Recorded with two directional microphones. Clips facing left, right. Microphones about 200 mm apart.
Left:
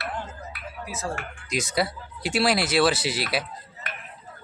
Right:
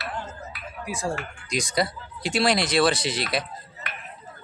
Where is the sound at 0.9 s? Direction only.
15° right (ahead or behind).